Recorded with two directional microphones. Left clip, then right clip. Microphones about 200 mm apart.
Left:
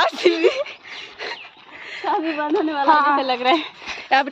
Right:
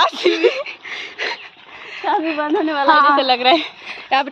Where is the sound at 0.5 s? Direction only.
15° left (ahead or behind).